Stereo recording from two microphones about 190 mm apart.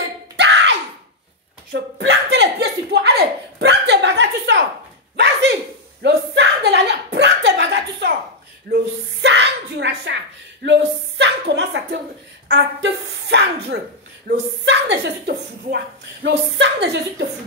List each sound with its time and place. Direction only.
0.4 s music: 65° right (ahead or behind)
1.7 s a woman's voice: 65° right (ahead or behind)
6.0 s a sound: 65° right (ahead or behind)
8.7 s a woman's voice: 65° right (ahead or behind)